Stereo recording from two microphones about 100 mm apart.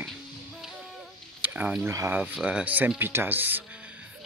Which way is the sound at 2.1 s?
15° right (ahead or behind).